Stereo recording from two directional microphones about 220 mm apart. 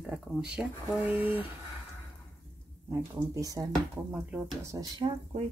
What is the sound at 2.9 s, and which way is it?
Speech, 15° right (ahead or behind).